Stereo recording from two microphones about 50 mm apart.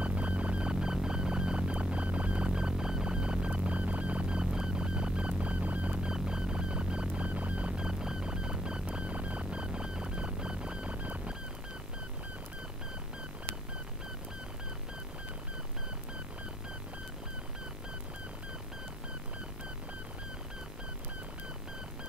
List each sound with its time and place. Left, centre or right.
0.0 s music: right
6.0 s music: centre